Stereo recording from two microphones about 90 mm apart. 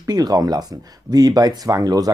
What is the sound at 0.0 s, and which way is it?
Speech, 45° right (ahead or behind).